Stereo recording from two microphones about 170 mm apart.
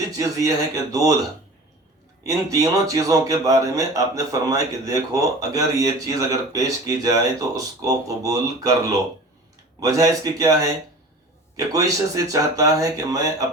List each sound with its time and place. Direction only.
0.2 s speech: 20° right (ahead or behind)
2.2 s speech: 20° right (ahead or behind)